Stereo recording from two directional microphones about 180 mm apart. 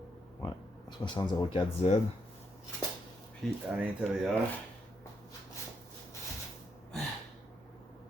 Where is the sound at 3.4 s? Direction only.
5° right (ahead or behind).